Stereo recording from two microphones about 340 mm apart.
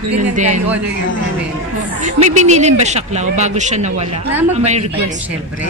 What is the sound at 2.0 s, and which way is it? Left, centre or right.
Speech, right.